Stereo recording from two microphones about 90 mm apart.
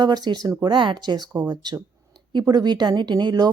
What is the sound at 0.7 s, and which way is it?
A woman's voice, 60° right (ahead or behind).